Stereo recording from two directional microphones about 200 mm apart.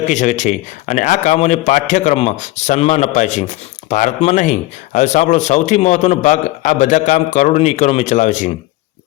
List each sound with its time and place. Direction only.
0.0 s a man's voice: 35° left (ahead or behind)